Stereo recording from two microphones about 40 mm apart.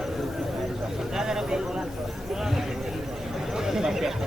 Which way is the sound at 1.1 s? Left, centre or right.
Centre.